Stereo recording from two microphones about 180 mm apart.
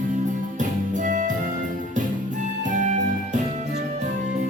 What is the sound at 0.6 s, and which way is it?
Music, 45° right (ahead or behind).